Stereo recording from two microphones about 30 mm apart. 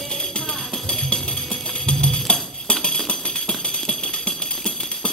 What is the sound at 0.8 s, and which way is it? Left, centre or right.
Music, centre.